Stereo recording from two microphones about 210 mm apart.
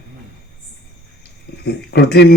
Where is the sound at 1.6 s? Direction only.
50° left (ahead or behind).